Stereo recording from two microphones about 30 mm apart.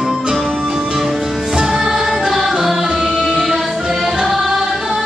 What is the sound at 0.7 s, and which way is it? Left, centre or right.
Music, right.